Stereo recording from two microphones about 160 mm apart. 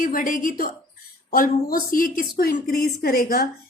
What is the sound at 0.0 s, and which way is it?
A woman's voice, 60° left (ahead or behind).